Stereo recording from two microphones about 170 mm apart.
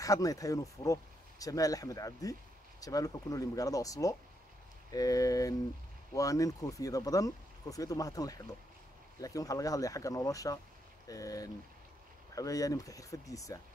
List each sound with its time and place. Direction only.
0.0 s speech: 20° left (ahead or behind)